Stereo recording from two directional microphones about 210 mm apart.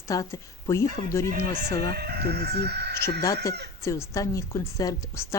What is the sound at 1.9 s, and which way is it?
Speech, 50° right (ahead or behind).